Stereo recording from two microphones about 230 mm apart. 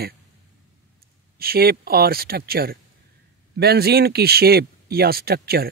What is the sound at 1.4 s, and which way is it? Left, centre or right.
Speech, right.